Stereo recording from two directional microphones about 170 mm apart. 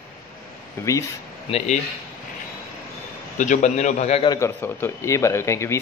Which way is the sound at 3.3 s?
45° left (ahead or behind).